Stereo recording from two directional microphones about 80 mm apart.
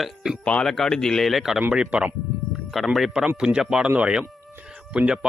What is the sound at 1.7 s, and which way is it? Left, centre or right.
Speech, centre.